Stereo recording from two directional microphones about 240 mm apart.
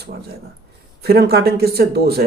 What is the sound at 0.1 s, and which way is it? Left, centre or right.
Speech, right.